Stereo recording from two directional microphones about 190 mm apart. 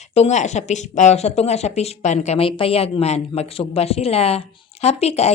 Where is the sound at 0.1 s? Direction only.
35° left (ahead or behind).